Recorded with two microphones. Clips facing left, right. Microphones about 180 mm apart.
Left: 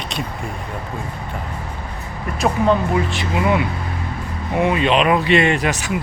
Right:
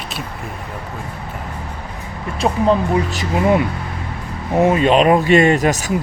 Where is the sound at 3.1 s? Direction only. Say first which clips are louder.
Right 3 dB; 40° right (ahead or behind).